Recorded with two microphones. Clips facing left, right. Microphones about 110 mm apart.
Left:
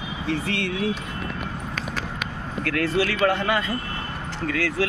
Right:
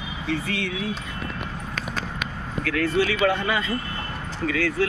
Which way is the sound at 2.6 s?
65° left (ahead or behind).